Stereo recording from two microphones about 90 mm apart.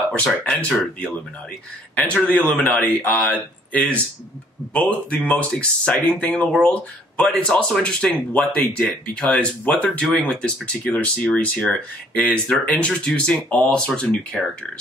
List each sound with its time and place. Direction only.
0.4 s speech: 10° left (ahead or behind)
2.0 s speech: 15° left (ahead or behind)